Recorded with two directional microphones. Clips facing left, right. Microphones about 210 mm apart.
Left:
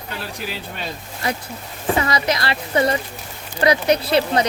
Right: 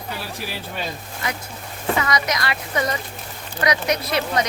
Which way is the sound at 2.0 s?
30° left (ahead or behind).